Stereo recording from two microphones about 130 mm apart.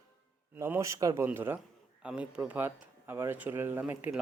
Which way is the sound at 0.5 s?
15° right (ahead or behind).